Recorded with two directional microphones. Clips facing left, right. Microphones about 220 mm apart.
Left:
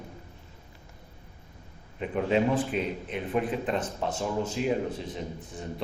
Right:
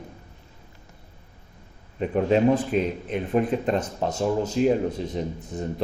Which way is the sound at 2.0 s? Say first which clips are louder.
Right 5 dB; 40° right (ahead or behind).